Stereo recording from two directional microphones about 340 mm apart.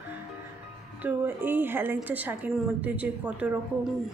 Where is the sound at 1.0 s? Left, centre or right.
Centre.